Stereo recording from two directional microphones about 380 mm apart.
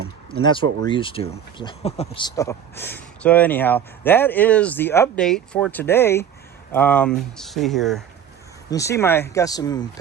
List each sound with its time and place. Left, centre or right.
0.9 s speech: centre